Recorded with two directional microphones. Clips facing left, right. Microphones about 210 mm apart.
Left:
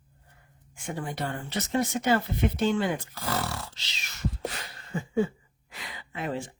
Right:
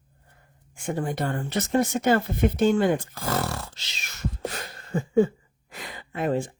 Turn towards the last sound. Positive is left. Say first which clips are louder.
# right 7 dB
turn(degrees=-50)  # may be behind; listen again after turning